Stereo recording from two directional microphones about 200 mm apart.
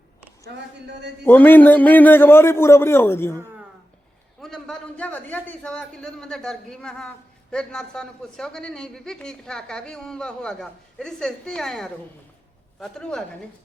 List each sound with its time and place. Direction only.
0.5 s speech: 55° right (ahead or behind)
1.2 s a man's voice: 10° left (ahead or behind)